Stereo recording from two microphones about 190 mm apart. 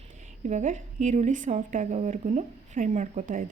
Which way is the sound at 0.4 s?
40° right (ahead or behind).